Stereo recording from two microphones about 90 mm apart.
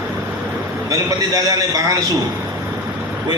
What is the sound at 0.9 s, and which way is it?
Speech, 40° right (ahead or behind).